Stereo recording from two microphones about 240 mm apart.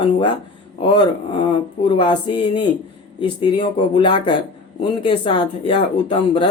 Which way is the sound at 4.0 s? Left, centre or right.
Centre.